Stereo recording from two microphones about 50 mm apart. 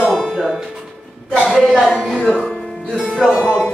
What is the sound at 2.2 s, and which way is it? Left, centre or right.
Music, left.